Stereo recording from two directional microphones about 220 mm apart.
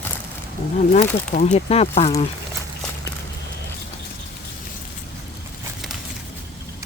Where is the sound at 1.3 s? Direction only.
30° left (ahead or behind).